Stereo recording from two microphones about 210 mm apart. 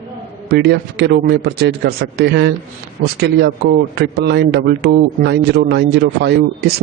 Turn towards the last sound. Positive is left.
turn(degrees=-50)  # may be behind; listen again after turning